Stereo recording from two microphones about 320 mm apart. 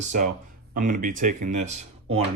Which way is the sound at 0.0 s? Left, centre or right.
Right.